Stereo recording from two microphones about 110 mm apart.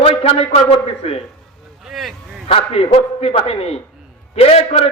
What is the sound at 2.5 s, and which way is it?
A man's voice, 60° left (ahead or behind).